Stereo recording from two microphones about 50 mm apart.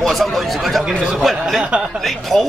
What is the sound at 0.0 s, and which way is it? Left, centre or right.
Speech, centre.